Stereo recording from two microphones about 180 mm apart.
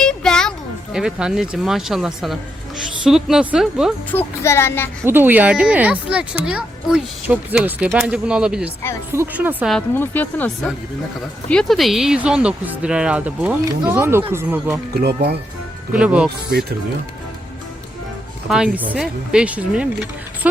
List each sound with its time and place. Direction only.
0.0 s music: 5° left (ahead or behind)
0.9 s speech: 5° right (ahead or behind)
4.1 s speech: 15° left (ahead or behind)
5.0 s speech: 10° right (ahead or behind)
9.7 s speech: 10° left (ahead or behind); by 14.8 s 10° right (ahead or behind)
15.0 s speech: 65° right (ahead or behind)
15.9 s speech: 5° right (ahead or behind)
16.5 s speech: 65° right (ahead or behind)
18.4 s speech: 5° right (ahead or behind)